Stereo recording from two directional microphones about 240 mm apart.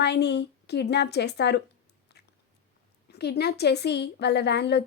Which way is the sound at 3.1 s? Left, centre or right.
Left.